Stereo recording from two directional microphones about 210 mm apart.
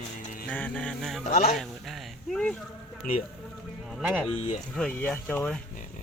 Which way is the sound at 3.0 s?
40° left (ahead or behind).